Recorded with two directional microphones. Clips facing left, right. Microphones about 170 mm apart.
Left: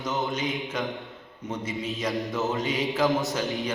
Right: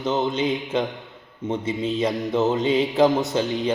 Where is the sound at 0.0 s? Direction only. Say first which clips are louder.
Right 6 dB; 30° right (ahead or behind).